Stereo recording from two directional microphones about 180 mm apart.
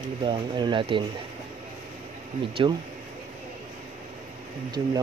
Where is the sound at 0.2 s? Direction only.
25° right (ahead or behind).